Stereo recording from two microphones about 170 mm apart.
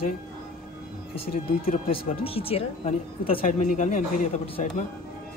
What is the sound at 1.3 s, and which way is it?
Speech, 60° left (ahead or behind).